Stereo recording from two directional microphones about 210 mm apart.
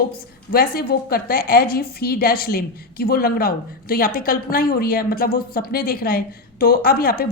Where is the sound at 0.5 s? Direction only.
45° left (ahead or behind).